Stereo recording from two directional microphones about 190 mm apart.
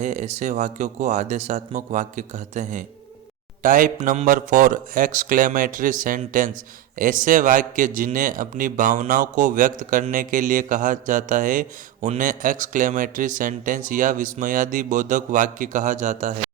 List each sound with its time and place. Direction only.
0.0 s a man's voice: 40° right (ahead or behind)